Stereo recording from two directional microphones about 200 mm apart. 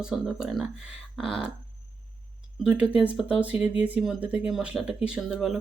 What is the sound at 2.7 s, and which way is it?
Speech, 5° right (ahead or behind).